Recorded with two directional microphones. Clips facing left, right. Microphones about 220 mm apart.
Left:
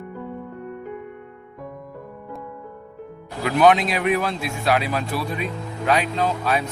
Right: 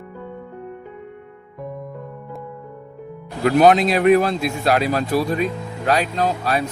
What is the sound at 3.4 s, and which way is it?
A man's voice, 40° right (ahead or behind).